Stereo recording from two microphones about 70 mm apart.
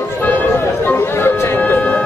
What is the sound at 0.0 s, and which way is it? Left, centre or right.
Music, left.